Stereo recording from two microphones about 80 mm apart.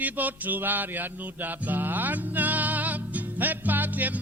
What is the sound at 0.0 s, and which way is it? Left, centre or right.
Music, right.